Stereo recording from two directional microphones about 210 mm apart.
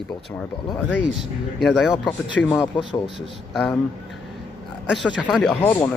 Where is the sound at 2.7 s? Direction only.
25° left (ahead or behind).